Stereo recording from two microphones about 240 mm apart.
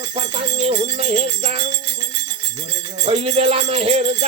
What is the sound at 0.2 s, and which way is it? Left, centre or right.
Music, right.